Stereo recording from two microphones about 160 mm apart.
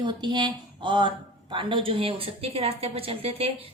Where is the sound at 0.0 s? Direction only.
30° right (ahead or behind).